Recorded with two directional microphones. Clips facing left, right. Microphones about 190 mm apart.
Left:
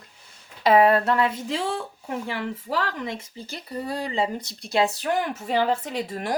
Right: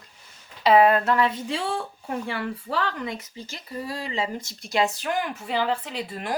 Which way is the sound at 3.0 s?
25° left (ahead or behind).